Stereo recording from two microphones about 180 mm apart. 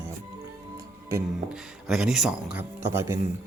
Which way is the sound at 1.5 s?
Centre (ahead or behind).